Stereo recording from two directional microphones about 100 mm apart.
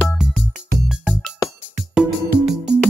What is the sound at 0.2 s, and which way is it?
Music, 5° right (ahead or behind).